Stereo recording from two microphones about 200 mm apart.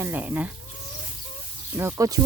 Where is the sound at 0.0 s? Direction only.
10° right (ahead or behind).